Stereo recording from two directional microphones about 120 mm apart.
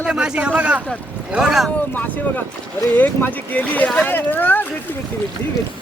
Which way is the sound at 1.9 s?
15° left (ahead or behind).